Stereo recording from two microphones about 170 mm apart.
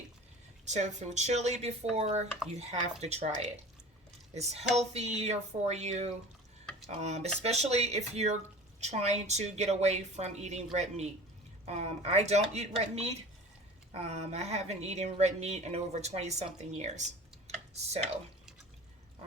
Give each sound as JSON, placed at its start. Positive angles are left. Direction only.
{"t": 0.6, "sound": "a woman's voice", "side_deg": -45}
{"t": 4.4, "sound": "a woman's voice", "side_deg": -40}